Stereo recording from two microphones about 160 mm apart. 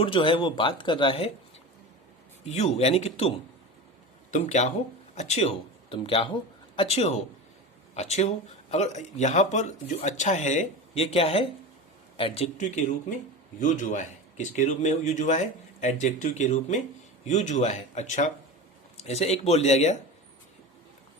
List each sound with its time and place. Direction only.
0.0 s speech: 30° left (ahead or behind)
2.5 s speech: 40° left (ahead or behind)